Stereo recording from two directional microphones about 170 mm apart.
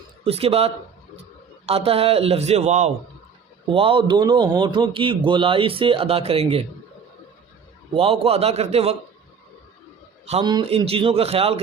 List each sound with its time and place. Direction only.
0.3 s a man's voice: 35° right (ahead or behind)
7.9 s a man's voice: 35° right (ahead or behind)
10.4 s a man's voice: 25° right (ahead or behind)